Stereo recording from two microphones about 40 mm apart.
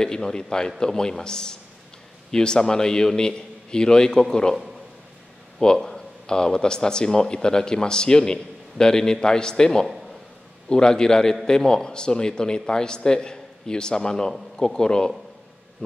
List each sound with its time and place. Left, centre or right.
0.0 s a man's voice: centre
5.6 s a man's voice: centre